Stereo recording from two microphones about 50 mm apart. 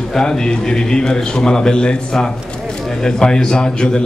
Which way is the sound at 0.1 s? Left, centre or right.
Centre.